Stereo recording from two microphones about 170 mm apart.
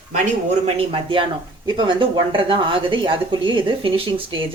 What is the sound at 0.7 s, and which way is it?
Speech, 35° right (ahead or behind).